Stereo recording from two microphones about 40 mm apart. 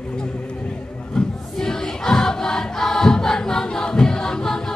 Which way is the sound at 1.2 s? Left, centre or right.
Centre.